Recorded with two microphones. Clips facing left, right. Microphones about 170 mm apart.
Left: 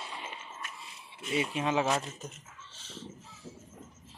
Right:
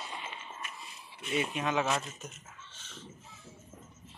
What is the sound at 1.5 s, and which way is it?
Speech, 30° left (ahead or behind).